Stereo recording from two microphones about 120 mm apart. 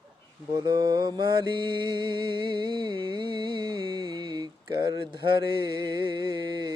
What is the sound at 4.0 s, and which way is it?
Mantra, 40° right (ahead or behind).